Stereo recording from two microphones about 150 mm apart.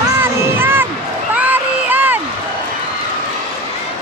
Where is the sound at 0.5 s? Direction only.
15° right (ahead or behind).